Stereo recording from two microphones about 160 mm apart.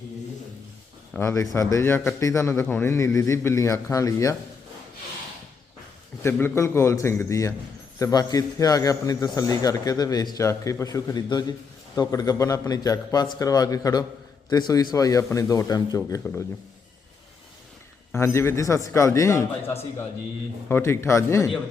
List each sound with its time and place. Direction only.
1.2 s a man's voice: 20° left (ahead or behind)
6.2 s a man's voice: 15° left (ahead or behind)
18.1 s a man's voice: 15° left (ahead or behind)